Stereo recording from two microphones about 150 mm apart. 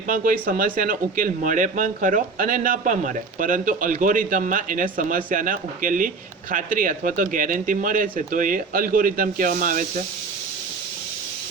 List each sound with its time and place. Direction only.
0.1 s speech: 70° right (ahead or behind)